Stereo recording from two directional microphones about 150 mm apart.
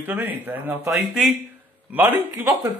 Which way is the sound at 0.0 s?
15° right (ahead or behind).